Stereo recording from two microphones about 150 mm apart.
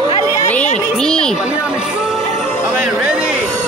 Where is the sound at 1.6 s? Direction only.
5° right (ahead or behind).